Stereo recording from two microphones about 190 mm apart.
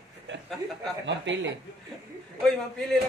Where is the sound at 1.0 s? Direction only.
70° right (ahead or behind).